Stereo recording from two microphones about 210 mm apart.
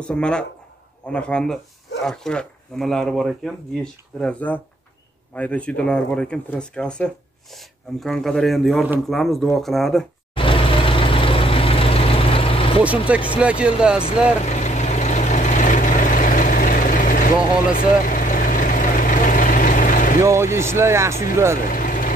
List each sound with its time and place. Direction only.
0.0 s speech: 5° left (ahead or behind)
10.3 s vehicle: 25° left (ahead or behind)
13.1 s speech: 5° right (ahead or behind)
14.0 s vehicle: 30° left (ahead or behind)
20.5 s speech: 10° right (ahead or behind)
21.7 s vehicle: 40° left (ahead or behind)